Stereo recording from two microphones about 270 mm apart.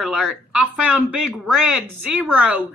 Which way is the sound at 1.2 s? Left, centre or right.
Right.